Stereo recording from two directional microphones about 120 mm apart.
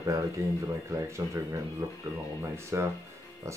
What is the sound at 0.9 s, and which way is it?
Speech, 25° right (ahead or behind).